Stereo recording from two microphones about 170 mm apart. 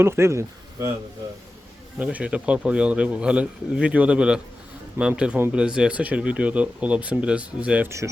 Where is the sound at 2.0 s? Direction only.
10° right (ahead or behind).